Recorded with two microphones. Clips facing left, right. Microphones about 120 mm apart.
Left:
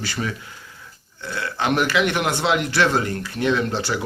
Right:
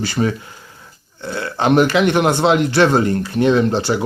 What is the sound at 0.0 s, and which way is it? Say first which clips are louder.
Speech: right 8 dB; 30° right (ahead or behind).